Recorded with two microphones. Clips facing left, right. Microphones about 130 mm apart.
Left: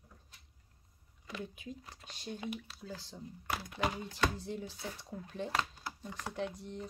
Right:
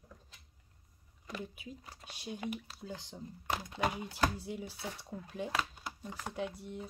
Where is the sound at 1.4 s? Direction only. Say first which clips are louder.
Left 2 dB; 5° right (ahead or behind).